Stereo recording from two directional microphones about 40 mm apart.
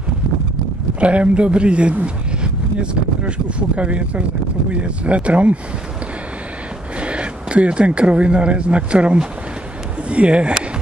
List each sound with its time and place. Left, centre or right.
1.0 s a man's voice: right
7.0 s a man's voice: right